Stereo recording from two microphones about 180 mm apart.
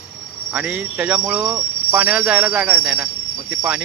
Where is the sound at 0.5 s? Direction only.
5° right (ahead or behind).